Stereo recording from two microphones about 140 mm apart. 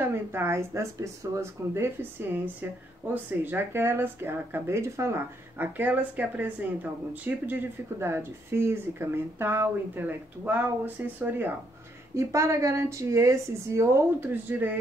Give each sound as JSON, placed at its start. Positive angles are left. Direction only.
{"t": 0.0, "sound": "a woman's voice", "side_deg": -15}